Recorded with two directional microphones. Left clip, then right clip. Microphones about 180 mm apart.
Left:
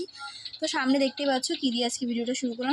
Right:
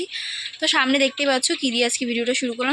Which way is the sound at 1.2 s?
25° right (ahead or behind).